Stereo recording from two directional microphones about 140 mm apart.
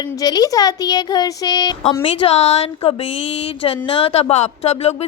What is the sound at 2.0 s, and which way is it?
A woman's voice, 45° left (ahead or behind).